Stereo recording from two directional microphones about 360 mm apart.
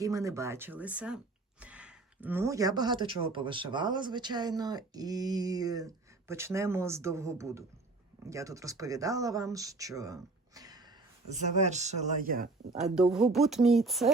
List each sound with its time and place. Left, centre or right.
0.0 s speech: centre
12.9 s speech: centre